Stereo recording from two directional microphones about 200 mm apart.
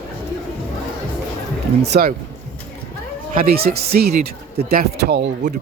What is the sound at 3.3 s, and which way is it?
A man's voice, 50° right (ahead or behind).